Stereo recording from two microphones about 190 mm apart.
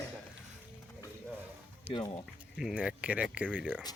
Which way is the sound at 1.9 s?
25° left (ahead or behind).